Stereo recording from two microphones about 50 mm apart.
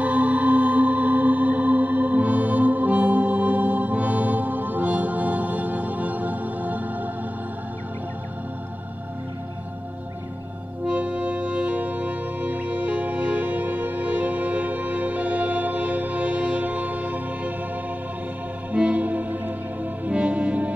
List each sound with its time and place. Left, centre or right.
0.0 s music: right
10.9 s music: right
18.7 s music: right